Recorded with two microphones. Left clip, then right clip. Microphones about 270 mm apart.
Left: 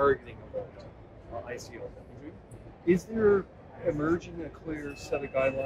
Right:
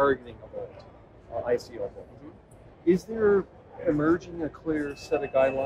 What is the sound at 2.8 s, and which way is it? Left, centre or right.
Speech, right.